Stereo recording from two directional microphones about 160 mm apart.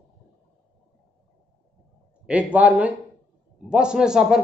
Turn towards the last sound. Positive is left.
turn(degrees=-5)  # may be behind; listen again after turning